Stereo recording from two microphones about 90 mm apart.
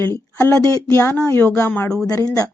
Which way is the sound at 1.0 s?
30° left (ahead or behind).